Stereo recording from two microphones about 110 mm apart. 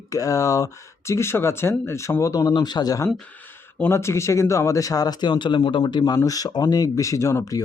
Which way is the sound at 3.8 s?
25° left (ahead or behind).